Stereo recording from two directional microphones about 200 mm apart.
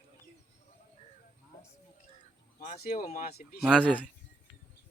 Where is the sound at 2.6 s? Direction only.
40° left (ahead or behind).